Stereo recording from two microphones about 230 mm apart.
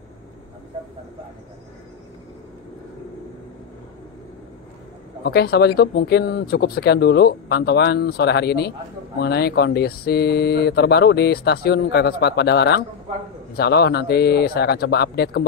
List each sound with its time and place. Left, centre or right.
5.2 s speech: left